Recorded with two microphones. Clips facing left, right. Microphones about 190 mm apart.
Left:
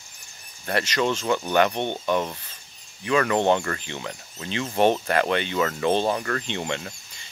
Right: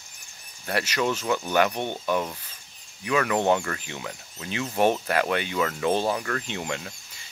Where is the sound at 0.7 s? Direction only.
5° right (ahead or behind).